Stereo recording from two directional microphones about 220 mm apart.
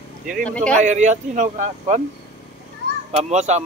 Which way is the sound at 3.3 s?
30° right (ahead or behind).